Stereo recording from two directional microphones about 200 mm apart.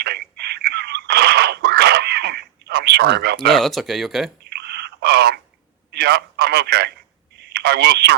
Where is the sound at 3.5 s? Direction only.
Centre (ahead or behind).